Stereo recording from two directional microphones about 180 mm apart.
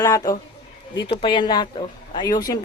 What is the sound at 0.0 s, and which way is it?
A woman's voice, 20° left (ahead or behind).